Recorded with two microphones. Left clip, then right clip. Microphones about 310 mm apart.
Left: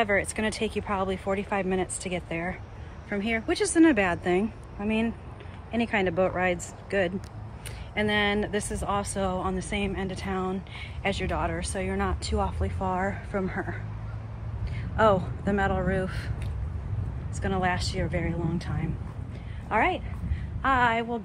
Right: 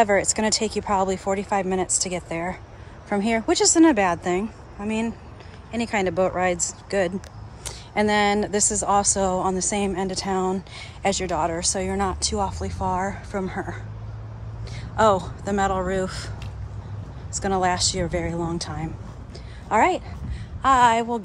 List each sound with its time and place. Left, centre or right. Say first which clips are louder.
0.0 s a woman's voice: right 6 dB; centre
17.5 s a woman's voice: right 6 dB; centre